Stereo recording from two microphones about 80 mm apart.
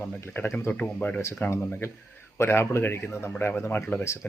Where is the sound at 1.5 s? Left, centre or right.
Left.